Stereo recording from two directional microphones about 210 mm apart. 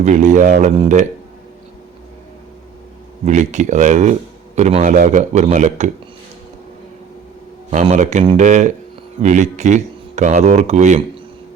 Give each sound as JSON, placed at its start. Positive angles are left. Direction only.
{"t": 0.0, "sound": "speech", "side_deg": -35}
{"t": 3.2, "sound": "speech", "side_deg": -35}
{"t": 7.7, "sound": "speech", "side_deg": -35}